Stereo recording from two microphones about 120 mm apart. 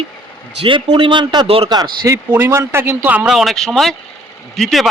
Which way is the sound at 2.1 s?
20° right (ahead or behind).